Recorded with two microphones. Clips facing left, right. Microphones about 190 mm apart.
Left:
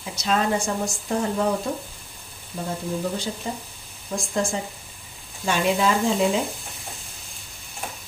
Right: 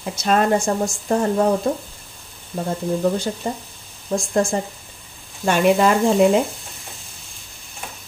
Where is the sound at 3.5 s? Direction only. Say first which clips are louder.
Right 5 dB; 45° right (ahead or behind).